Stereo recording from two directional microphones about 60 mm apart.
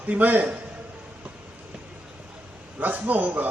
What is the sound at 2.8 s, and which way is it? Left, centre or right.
Speech, right.